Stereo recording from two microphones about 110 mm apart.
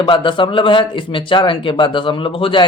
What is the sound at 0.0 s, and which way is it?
Speech, 45° left (ahead or behind).